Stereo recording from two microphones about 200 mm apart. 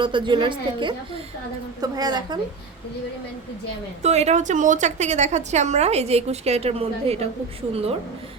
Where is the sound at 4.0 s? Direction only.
35° right (ahead or behind).